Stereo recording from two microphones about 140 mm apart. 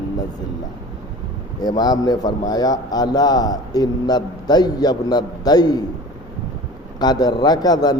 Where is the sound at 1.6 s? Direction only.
30° left (ahead or behind).